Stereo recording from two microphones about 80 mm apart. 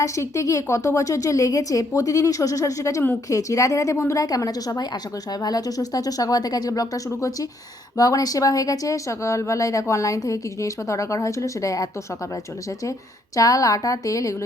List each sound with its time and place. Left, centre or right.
0.0 s speech: left
13.3 s speech: left